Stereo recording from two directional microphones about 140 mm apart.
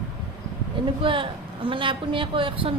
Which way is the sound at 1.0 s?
40° right (ahead or behind).